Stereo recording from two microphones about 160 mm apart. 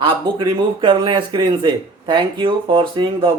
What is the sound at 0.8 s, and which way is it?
Speech, 30° right (ahead or behind).